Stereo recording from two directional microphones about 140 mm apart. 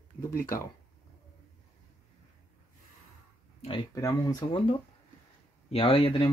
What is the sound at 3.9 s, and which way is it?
Speech, 25° left (ahead or behind).